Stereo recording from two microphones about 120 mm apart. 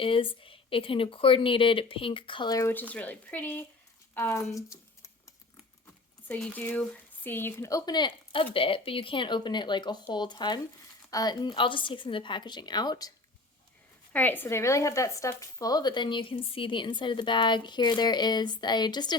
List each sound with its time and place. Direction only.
0.0 s speech: 50° left (ahead or behind)
2.6 s speech: 15° left (ahead or behind)
6.2 s speech: 15° left (ahead or behind); by 13.1 s 35° left (ahead or behind)
14.1 s speech: 15° left (ahead or behind); by 19.1 s 35° left (ahead or behind)